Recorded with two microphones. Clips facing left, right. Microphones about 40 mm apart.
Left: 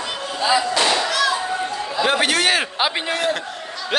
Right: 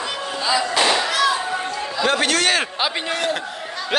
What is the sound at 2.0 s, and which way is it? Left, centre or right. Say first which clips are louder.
A man's voice: left 1 dB; centre.